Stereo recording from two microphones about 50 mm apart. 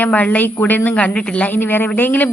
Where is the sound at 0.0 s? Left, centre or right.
Left.